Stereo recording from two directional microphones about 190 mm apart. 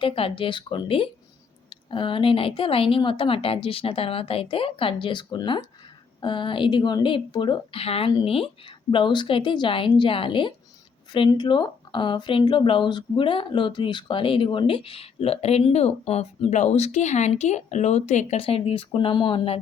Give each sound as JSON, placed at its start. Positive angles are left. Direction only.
{"t": 0.0, "sound": "speech", "side_deg": 30}